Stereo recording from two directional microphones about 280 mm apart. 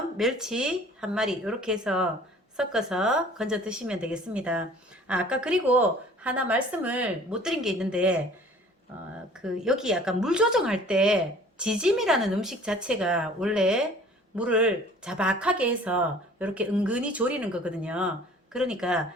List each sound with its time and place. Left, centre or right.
0.2 s a woman's voice: centre